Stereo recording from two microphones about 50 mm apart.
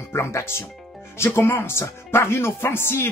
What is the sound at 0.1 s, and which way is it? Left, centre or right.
Speech, left.